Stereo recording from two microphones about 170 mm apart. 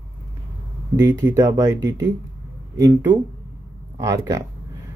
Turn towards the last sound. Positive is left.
turn(degrees=-20)  # may be behind; listen again after turning